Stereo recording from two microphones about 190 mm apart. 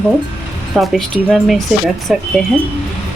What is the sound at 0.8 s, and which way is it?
Speech, centre (ahead or behind).